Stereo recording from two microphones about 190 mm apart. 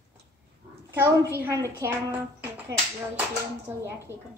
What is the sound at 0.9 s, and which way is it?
A woman's voice, 10° right (ahead or behind).